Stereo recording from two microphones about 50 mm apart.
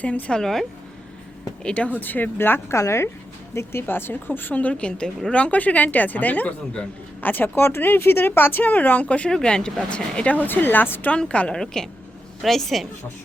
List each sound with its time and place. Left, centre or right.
0.0 s speech: left
0.3 s speech: centre
1.6 s speech: left
2.0 s speech: left
2.7 s speech: left
4.5 s speech: left
9.3 s speech: centre
10.3 s speech: left
11.1 s speech: left
11.5 s a woman's voice: centre